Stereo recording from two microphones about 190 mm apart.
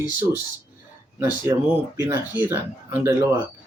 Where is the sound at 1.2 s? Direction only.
15° right (ahead or behind).